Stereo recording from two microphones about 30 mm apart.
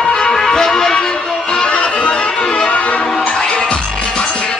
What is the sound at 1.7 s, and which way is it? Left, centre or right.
Music, left.